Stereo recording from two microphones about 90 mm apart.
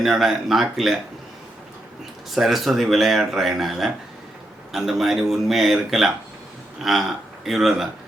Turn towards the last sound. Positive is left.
turn(degrees=-5)  # may be behind; listen again after turning